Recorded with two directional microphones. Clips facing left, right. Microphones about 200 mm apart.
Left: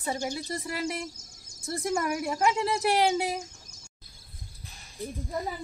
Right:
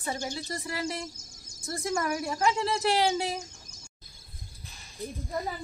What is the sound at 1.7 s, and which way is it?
A woman's voice, 20° left (ahead or behind).